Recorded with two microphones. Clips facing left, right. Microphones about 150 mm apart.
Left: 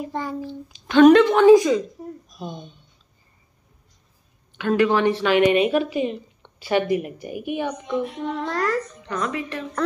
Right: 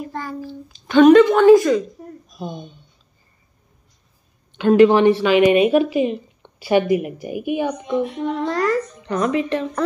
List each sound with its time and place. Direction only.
0.0 s a child's voice: 20° left (ahead or behind)
0.8 s a woman's voice: 5° right (ahead or behind)
1.5 s a woman's voice: 15° left (ahead or behind)
4.6 s a woman's voice: 25° right (ahead or behind)
5.1 s a woman's voice: 10° right (ahead or behind)
9.0 s a woman's voice: 20° right (ahead or behind)